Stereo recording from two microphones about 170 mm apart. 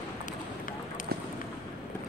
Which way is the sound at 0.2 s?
50° left (ahead or behind).